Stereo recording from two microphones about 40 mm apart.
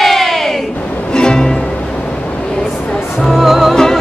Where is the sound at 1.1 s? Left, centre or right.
Centre.